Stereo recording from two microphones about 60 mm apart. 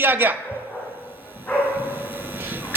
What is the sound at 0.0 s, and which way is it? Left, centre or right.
Speech, right.